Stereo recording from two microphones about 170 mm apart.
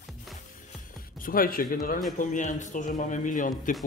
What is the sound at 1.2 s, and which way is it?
A man's voice, 55° left (ahead or behind).